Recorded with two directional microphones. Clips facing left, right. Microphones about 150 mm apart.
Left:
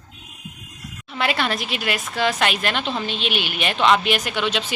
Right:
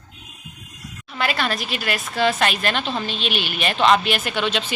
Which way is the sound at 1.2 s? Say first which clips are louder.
Left 1 dB; 20° left (ahead or behind).